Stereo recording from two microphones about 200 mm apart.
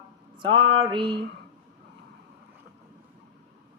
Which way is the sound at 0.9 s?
25° right (ahead or behind).